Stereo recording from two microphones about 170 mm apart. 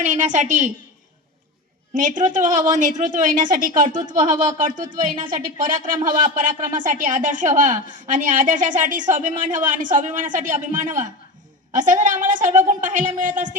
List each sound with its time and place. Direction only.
0.0 s a woman's voice: 45° right (ahead or behind)
1.9 s a woman's voice: 50° right (ahead or behind)